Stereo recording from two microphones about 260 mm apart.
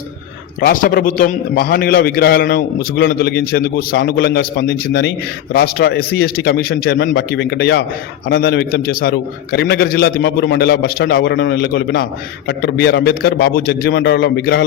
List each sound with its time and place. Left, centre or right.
0.6 s a man's voice: left